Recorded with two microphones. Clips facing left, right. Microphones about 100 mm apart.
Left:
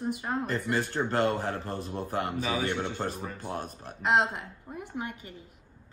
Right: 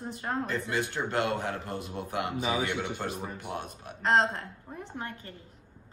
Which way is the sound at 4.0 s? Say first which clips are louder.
Even; 10° left (ahead or behind).